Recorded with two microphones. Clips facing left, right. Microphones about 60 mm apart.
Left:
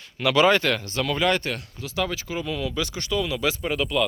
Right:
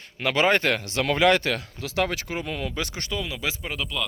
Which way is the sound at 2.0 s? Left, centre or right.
Right.